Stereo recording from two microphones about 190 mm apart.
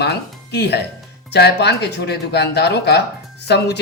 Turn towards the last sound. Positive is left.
turn(degrees=60)  # may be behind; listen again after turning